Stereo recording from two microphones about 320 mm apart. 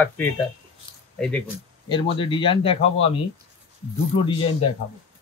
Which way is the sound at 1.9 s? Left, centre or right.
Centre.